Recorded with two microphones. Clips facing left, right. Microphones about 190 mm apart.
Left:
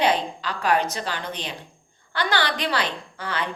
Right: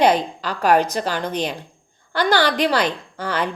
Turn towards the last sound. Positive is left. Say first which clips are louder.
# right 5 dB
turn(degrees=-40)  # may be behind; listen again after turning